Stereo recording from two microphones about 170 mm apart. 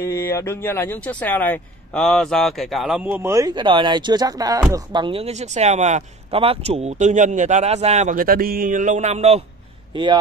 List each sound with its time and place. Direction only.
0.0 s speech: 15° left (ahead or behind); by 9.4 s 40° right (ahead or behind)